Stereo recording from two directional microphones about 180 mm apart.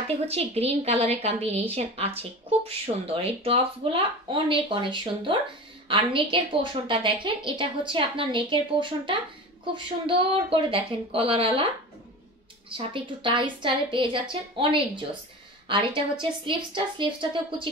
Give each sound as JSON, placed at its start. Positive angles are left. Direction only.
{"t": 0.2, "sound": "a woman's voice", "side_deg": -35}
{"t": 12.6, "sound": "a woman's voice", "side_deg": -30}